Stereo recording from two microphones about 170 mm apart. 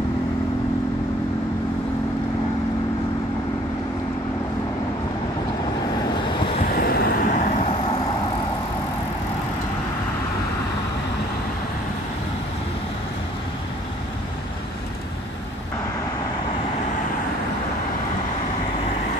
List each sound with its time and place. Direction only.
6.1 s waves: 30° left (ahead or behind)
6.6 s vehicle: 60° left (ahead or behind)